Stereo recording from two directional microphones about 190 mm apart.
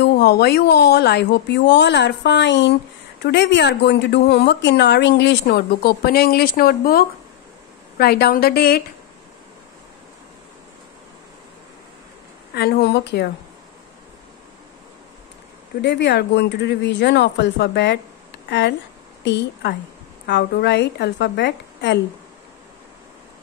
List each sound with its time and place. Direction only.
0.0 s a woman's voice: 55° left (ahead or behind)
12.5 s a woman's voice: 55° left (ahead or behind)
15.8 s a woman's voice: 65° left (ahead or behind)